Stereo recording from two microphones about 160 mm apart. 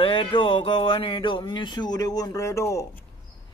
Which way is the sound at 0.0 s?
35° left (ahead or behind).